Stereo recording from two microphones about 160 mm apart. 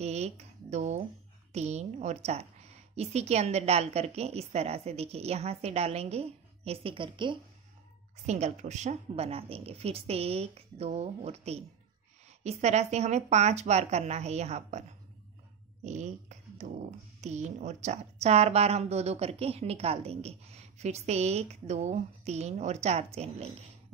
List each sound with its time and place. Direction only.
0.0 s a woman's voice: 40° right (ahead or behind)
8.3 s a woman's voice: 45° right (ahead or behind)